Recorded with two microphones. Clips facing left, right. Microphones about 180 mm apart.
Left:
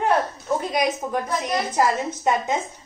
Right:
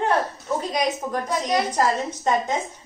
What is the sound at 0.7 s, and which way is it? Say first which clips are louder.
Speech: left 1 dB; 5° left (ahead or behind).